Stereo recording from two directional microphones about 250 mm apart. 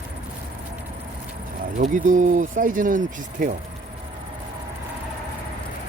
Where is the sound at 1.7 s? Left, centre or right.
Right.